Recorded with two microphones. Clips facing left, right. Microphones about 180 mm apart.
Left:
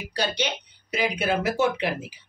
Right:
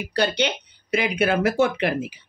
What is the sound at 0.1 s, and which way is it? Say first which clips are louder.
Speech: right 5 dB; 60° right (ahead or behind).